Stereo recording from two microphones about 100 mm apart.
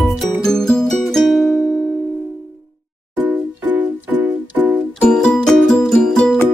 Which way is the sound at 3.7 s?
15° right (ahead or behind).